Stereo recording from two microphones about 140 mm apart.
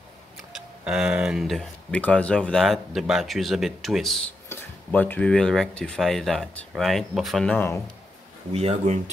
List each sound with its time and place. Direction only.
0.5 s speech: 5° right (ahead or behind)
4.5 s speech: 10° left (ahead or behind)
7.5 s speech: 15° left (ahead or behind)
8.5 s speech: 45° right (ahead or behind)